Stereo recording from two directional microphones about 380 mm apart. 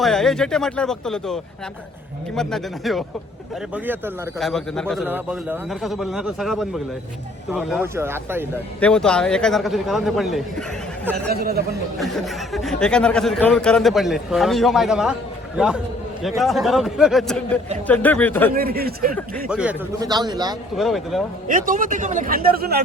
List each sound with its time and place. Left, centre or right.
0.0 s speech: centre
11.3 s a man's voice: right
11.7 s speech: centre
18.5 s a man's voice: right
19.5 s a man's voice: centre
20.7 s speech: centre
21.4 s a man's voice: right